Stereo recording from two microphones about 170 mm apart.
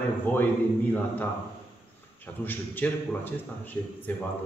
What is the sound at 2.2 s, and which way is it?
A man's voice, 10° left (ahead or behind).